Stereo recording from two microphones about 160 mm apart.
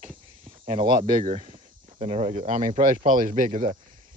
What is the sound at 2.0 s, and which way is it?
Speech, 40° right (ahead or behind).